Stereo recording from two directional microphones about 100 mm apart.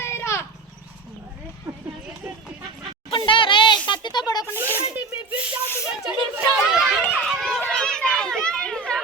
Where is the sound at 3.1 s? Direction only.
60° left (ahead or behind).